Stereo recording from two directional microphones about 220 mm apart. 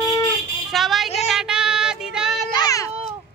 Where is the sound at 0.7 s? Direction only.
Centre (ahead or behind).